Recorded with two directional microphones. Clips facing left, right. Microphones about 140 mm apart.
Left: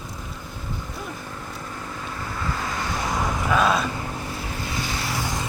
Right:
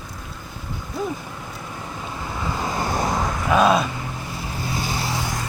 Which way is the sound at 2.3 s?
20° right (ahead or behind).